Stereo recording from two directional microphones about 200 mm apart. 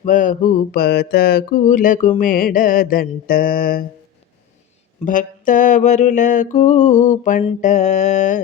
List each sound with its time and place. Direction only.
0.0 s mantra: 40° left (ahead or behind)
5.0 s mantra: 40° left (ahead or behind)